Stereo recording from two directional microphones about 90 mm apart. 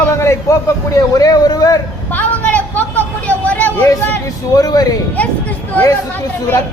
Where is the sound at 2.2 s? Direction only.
15° left (ahead or behind).